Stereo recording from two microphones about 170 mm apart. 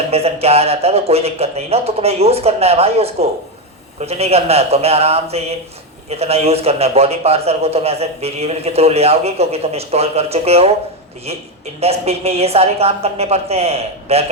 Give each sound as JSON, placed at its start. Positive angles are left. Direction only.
{"t": 0.1, "sound": "a man's voice", "side_deg": -35}